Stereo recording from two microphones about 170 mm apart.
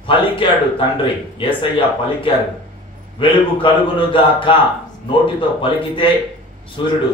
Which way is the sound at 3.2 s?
30° left (ahead or behind).